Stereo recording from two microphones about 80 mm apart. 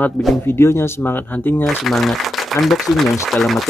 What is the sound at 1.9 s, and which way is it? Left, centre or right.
Speech, centre.